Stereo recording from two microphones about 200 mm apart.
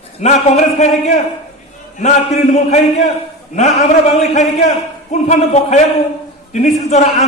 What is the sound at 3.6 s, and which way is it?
Speech, 35° left (ahead or behind).